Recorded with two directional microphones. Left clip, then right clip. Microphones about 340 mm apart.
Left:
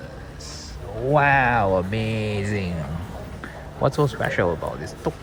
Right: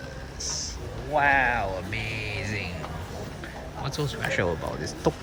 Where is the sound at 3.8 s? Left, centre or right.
Centre.